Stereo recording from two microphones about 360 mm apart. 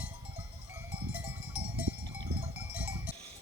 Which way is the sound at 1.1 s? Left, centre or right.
Centre.